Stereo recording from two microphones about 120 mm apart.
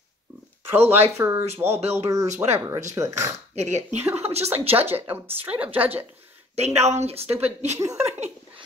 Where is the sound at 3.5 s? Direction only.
70° right (ahead or behind).